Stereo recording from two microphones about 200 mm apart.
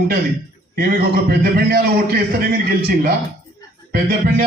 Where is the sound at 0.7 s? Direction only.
50° right (ahead or behind).